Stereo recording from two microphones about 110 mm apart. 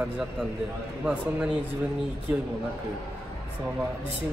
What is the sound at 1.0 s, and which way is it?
Speech, 10° right (ahead or behind).